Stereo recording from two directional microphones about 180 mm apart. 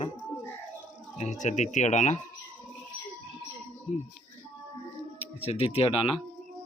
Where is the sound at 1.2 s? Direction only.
40° left (ahead or behind).